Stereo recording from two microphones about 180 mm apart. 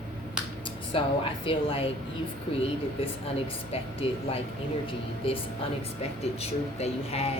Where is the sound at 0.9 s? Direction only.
30° left (ahead or behind).